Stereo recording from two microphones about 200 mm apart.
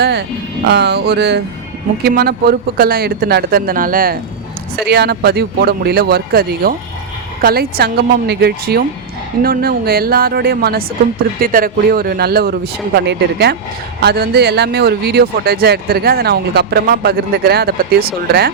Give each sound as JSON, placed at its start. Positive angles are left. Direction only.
{"t": 0.0, "sound": "speech", "side_deg": -55}